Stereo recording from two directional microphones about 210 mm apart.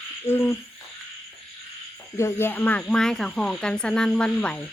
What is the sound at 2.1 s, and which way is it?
Speech, 10° left (ahead or behind).